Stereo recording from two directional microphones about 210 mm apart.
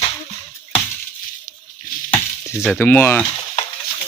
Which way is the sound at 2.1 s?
15° left (ahead or behind).